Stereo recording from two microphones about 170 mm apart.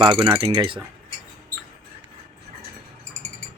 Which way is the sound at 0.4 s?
25° right (ahead or behind).